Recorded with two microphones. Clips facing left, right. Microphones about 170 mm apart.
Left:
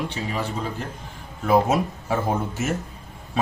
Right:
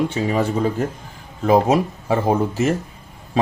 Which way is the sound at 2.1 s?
35° right (ahead or behind).